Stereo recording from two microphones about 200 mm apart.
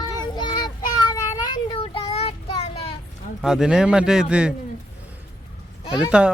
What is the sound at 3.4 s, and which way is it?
Speech, centre (ahead or behind).